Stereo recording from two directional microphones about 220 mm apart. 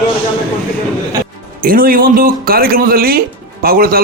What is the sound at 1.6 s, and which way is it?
A man's voice, 40° right (ahead or behind).